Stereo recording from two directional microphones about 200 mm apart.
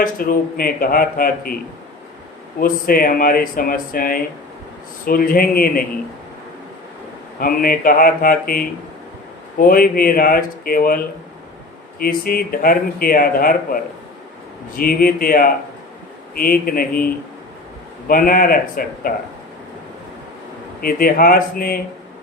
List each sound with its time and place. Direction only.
0.0 s speech: 45° left (ahead or behind)
2.6 s speech: 45° left (ahead or behind)
7.3 s speech: 45° left (ahead or behind)
14.8 s speech: 45° left (ahead or behind)
18.1 s speech: 45° left (ahead or behind)
20.8 s speech: 45° left (ahead or behind)